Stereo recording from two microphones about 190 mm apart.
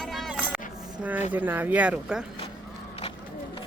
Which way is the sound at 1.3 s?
10° right (ahead or behind).